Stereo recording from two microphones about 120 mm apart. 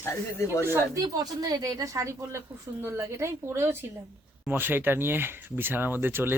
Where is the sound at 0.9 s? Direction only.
30° right (ahead or behind).